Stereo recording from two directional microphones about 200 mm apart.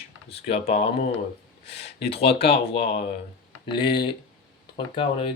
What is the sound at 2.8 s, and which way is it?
Speech, 55° left (ahead or behind).